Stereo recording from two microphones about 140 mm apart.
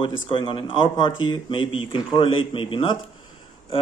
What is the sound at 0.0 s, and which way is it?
Speech, 35° left (ahead or behind).